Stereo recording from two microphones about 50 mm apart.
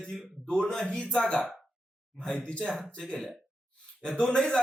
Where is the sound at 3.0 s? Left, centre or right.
Centre.